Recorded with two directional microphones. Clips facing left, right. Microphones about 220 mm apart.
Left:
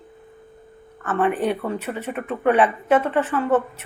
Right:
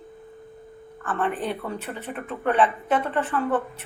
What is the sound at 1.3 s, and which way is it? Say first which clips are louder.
Speech: left 6 dB; 65° left (ahead or behind).